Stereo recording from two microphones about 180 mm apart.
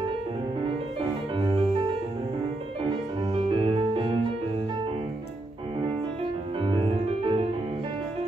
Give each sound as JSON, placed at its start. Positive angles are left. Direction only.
{"t": 1.3, "sound": "music", "side_deg": -25}
{"t": 3.3, "sound": "music", "side_deg": -30}
{"t": 6.6, "sound": "music", "side_deg": -30}